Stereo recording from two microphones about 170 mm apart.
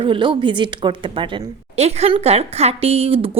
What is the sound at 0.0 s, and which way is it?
Speech, 30° right (ahead or behind).